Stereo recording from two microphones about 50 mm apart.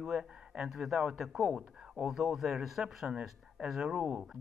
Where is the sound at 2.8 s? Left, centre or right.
Centre.